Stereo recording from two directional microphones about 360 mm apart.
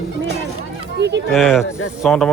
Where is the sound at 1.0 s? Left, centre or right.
Right.